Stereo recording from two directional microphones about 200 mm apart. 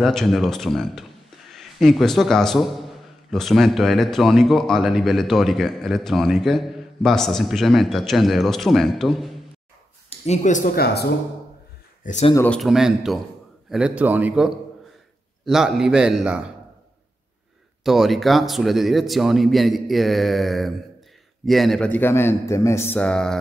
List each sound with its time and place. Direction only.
0.0 s a man's voice: centre (ahead or behind)
10.0 s speech: 35° left (ahead or behind)
10.8 s speech: 55° left (ahead or behind)
12.0 s speech: 35° left (ahead or behind)
12.4 s a man's voice: 5° left (ahead or behind)
17.8 s a man's voice: centre (ahead or behind)